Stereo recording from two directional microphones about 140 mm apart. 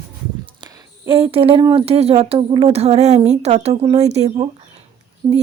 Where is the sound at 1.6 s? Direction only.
35° right (ahead or behind).